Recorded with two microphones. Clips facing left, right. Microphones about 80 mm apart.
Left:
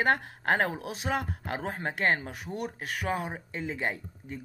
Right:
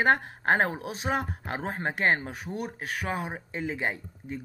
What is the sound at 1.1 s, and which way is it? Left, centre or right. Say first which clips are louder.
Speech: right 2 dB; right.